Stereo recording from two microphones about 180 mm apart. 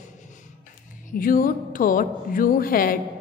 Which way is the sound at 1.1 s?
50° left (ahead or behind).